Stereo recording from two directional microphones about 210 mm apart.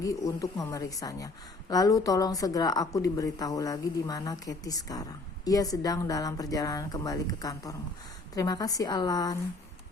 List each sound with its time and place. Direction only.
0.0 s a woman's voice: 15° left (ahead or behind)